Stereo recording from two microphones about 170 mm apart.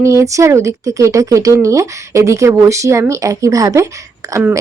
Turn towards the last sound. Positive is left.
turn(degrees=-10)  # may be behind; listen again after turning